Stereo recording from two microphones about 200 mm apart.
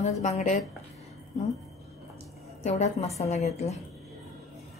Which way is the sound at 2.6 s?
35° left (ahead or behind).